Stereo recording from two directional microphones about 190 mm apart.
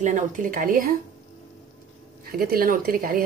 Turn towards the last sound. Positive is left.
turn(degrees=-50)  # may be behind; listen again after turning